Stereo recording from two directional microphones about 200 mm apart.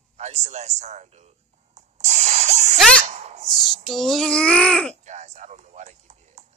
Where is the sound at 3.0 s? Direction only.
35° right (ahead or behind).